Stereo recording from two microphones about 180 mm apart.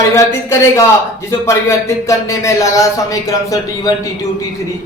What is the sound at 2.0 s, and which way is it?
A man's voice, 15° left (ahead or behind).